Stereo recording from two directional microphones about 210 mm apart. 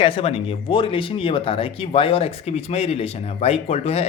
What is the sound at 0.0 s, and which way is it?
A man's voice, 25° left (ahead or behind).